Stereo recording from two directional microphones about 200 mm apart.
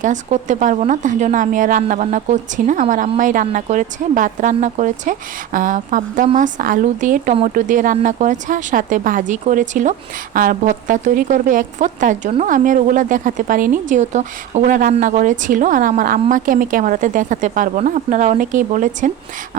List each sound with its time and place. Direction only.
0.0 s speech: 40° right (ahead or behind)